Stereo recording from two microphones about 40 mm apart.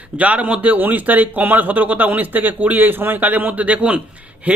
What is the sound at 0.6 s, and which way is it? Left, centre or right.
A man's voice, right.